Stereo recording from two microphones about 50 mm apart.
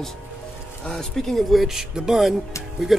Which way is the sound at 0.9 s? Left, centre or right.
Centre.